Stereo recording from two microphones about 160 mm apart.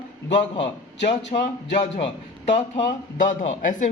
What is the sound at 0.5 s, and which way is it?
Speech, 30° left (ahead or behind).